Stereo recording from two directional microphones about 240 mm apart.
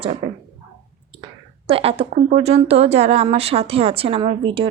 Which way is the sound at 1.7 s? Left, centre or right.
Right.